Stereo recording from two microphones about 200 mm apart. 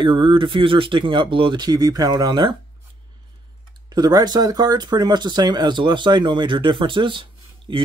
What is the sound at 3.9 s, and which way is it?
Speech, 20° right (ahead or behind).